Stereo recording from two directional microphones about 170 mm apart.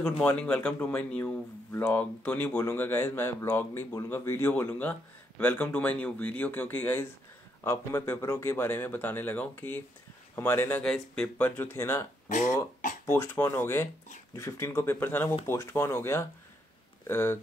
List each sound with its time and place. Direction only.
0.4 s speech: 5° left (ahead or behind)
12.3 s speech: 45° left (ahead or behind)
13.0 s speech: 15° left (ahead or behind)